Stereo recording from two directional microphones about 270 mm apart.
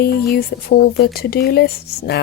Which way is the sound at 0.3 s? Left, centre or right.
Left.